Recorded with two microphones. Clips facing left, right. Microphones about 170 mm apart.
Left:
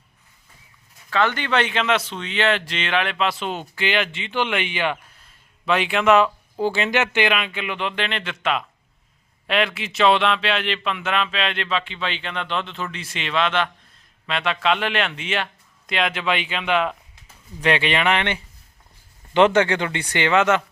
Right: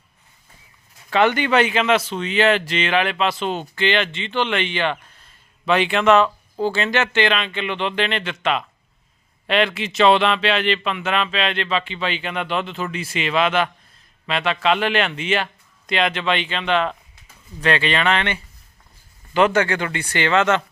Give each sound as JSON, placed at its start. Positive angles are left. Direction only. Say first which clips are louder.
{"t": 1.1, "sound": "speech", "louder": "right 4 dB", "side_deg": -15}